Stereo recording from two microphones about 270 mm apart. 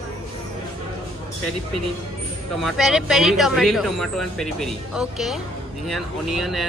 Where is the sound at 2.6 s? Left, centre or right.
Centre.